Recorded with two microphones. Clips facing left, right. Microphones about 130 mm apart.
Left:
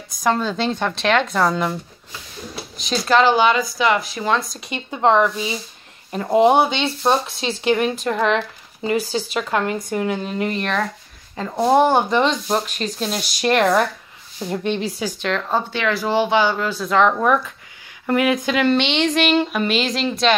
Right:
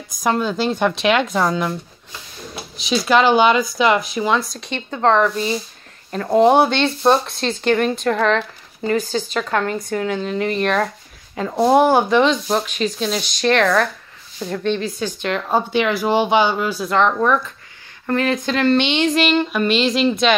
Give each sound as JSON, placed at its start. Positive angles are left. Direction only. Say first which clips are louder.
{"t": 0.2, "sound": "speech", "louder": "right 1 dB", "side_deg": -5}
{"t": 2.8, "sound": "speech", "louder": "right 1 dB", "side_deg": -10}
{"t": 4.2, "sound": "speech", "louder": "right 2 dB", "side_deg": -5}
{"t": 15.2, "sound": "speech", "louder": "right 2 dB", "side_deg": -10}
{"t": 16.9, "sound": "speech", "louder": "left 1 dB", "side_deg": 5}